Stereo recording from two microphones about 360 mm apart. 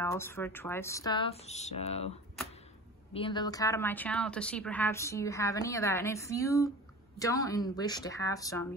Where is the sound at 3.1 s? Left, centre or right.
Centre.